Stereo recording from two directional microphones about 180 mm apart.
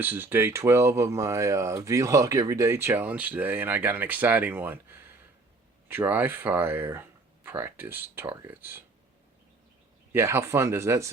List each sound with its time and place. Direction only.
0.0 s speech: 10° right (ahead or behind)
5.9 s speech: 10° right (ahead or behind)
10.1 s speech: 15° right (ahead or behind)